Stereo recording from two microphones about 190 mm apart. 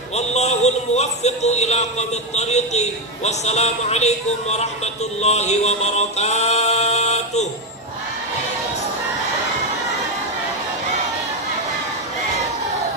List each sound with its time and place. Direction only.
0.1 s a man's voice: 35° left (ahead or behind)